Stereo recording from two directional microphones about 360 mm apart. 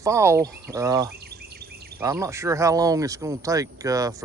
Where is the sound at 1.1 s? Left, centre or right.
Right.